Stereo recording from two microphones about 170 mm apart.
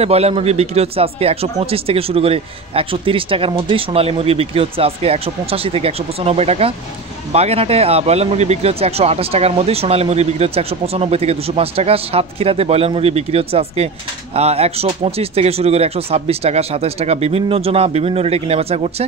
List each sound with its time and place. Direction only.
0.0 s speech: 35° right (ahead or behind)